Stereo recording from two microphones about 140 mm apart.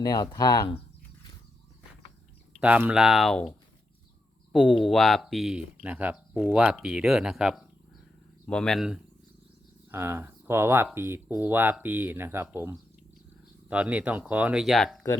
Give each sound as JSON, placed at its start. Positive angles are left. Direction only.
{"t": 0.0, "sound": "speech", "side_deg": 25}
{"t": 2.6, "sound": "speech", "side_deg": -10}
{"t": 4.8, "sound": "speech", "side_deg": 0}
{"t": 9.9, "sound": "speech", "side_deg": -15}